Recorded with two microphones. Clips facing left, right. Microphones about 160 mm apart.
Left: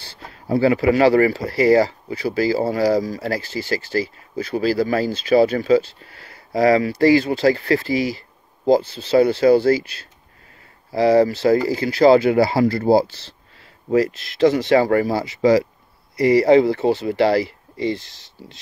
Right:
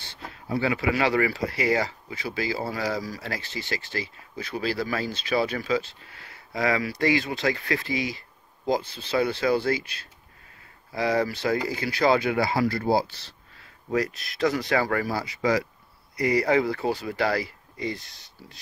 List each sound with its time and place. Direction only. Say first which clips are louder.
0.0 s speech: left 3 dB; 35° left (ahead or behind)